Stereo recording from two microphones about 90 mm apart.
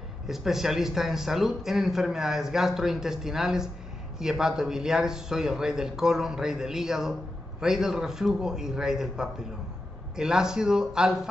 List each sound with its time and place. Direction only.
0.3 s a man's voice: 5° right (ahead or behind)